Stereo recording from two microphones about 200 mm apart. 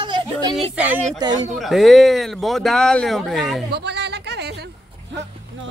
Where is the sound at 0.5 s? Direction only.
5° right (ahead or behind).